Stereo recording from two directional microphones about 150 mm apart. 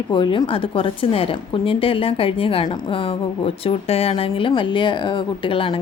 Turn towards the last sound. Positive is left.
turn(degrees=35)  # may be behind; listen again after turning